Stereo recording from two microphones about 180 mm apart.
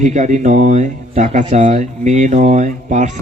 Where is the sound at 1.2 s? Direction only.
40° right (ahead or behind).